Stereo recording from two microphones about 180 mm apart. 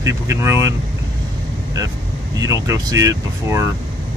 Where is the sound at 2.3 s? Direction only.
20° right (ahead or behind).